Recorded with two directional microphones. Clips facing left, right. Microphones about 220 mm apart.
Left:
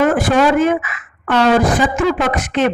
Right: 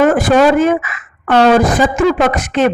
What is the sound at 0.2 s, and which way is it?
Speech, 40° right (ahead or behind).